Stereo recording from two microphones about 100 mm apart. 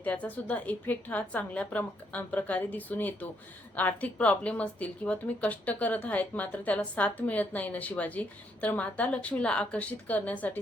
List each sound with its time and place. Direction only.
0.0 s speech: 15° left (ahead or behind)